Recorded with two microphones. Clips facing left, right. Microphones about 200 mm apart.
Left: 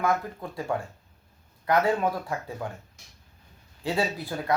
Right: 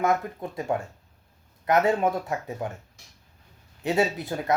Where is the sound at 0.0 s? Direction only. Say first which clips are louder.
Right 2 dB; 20° right (ahead or behind).